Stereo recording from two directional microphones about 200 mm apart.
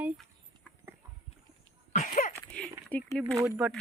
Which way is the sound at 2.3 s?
5° left (ahead or behind).